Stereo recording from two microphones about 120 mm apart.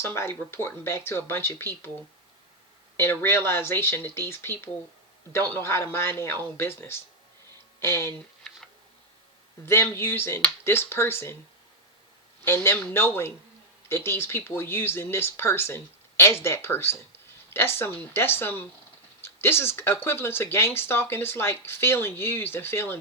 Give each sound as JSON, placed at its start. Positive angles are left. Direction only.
{"t": 0.0, "sound": "speech", "side_deg": 20}
{"t": 3.0, "sound": "speech", "side_deg": 20}
{"t": 9.6, "sound": "speech", "side_deg": 20}
{"t": 12.5, "sound": "speech", "side_deg": 20}